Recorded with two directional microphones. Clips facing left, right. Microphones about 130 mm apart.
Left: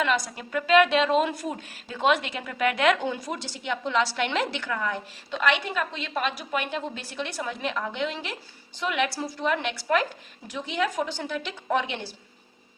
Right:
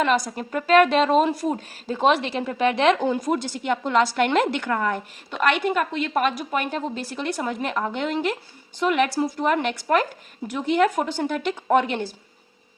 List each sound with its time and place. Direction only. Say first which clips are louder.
0.0 s a woman's voice: right 5 dB; 40° right (ahead or behind)
3.1 s a woman's voice: right 8 dB; 50° right (ahead or behind)